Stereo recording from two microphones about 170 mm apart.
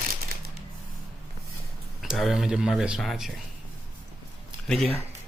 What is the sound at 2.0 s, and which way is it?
Speech, centre (ahead or behind).